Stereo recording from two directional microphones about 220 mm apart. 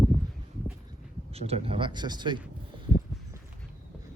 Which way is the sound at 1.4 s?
25° right (ahead or behind).